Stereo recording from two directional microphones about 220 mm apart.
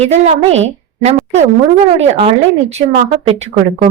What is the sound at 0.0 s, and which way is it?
A woman's voice, 30° right (ahead or behind).